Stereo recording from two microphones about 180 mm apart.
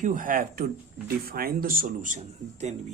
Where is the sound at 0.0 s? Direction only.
45° right (ahead or behind).